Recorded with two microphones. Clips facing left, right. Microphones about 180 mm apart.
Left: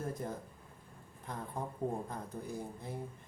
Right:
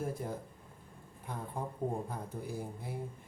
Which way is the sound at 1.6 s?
10° right (ahead or behind).